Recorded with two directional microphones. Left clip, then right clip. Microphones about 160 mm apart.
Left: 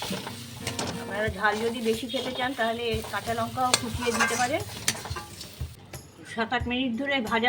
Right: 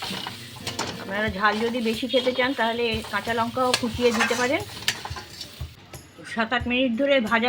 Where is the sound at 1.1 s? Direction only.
55° right (ahead or behind).